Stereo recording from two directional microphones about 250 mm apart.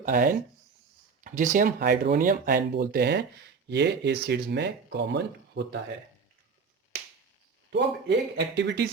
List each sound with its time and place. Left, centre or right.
0.0 s speech: right
7.7 s speech: right